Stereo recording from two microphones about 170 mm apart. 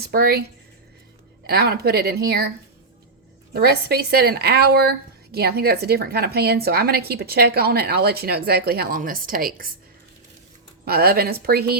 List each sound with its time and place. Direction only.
0.0 s a woman's voice: 65° right (ahead or behind)
1.5 s a woman's voice: 65° right (ahead or behind)
3.5 s a woman's voice: 70° right (ahead or behind)
10.8 s a woman's voice: 65° right (ahead or behind)